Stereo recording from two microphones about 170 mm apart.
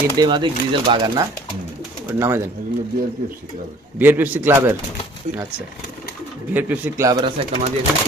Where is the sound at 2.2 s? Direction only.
15° right (ahead or behind).